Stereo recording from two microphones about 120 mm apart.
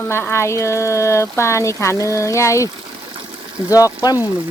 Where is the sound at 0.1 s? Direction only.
20° left (ahead or behind).